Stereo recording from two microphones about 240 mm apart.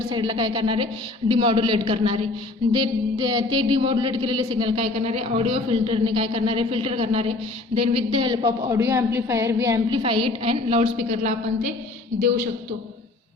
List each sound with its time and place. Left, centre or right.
0.1 s a woman's voice: centre